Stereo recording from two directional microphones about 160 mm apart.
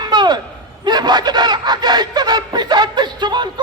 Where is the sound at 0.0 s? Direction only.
25° right (ahead or behind).